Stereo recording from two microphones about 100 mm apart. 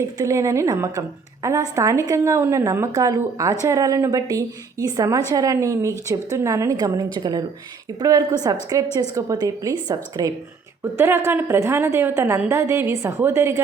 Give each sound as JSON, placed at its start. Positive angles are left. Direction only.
{"t": 0.0, "sound": "a woman's voice", "side_deg": -30}
{"t": 10.9, "sound": "a woman's voice", "side_deg": -25}